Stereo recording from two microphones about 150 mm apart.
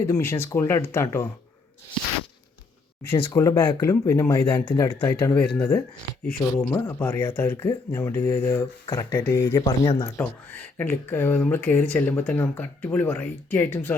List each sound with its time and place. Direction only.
0.0 s speech: 15° left (ahead or behind)
3.1 s speech: 35° left (ahead or behind)
3.3 s speech: 20° left (ahead or behind)
4.4 s speech: 35° left (ahead or behind)
4.9 s speech: 15° left (ahead or behind)
10.2 s speech: 10° left (ahead or behind)